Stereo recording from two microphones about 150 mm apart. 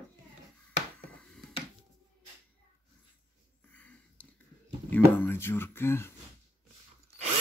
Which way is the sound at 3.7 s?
10° left (ahead or behind).